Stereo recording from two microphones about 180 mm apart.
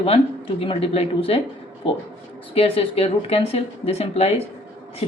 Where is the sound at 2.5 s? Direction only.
30° left (ahead or behind).